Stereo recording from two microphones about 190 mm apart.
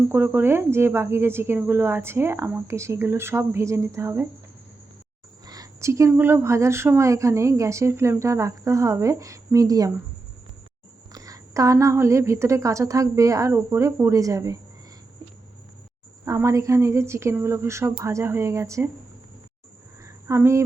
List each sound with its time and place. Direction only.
0.1 s speech: 10° right (ahead or behind)
5.5 s speech: 15° right (ahead or behind)
11.1 s speech: 20° right (ahead or behind)
16.2 s speech: 15° right (ahead or behind)
20.1 s a sound: 15° right (ahead or behind)